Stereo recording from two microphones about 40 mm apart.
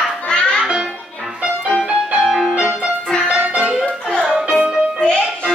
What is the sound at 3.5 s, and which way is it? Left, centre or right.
Music, right.